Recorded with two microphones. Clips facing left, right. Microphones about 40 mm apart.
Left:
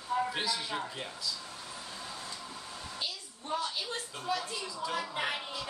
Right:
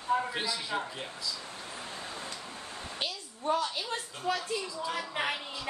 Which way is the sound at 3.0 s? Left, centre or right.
Right.